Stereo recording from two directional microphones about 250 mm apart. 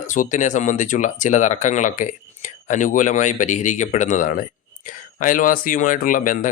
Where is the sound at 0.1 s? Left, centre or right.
Left.